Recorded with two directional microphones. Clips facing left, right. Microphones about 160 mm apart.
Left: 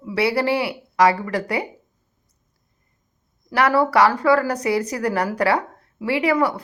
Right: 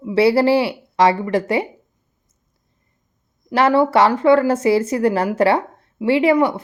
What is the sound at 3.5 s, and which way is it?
Speech, 25° right (ahead or behind).